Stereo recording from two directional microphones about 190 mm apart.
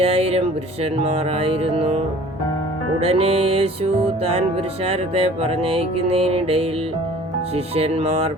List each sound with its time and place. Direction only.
0.0 s music: 30° right (ahead or behind)
3.0 s music: 30° right (ahead or behind)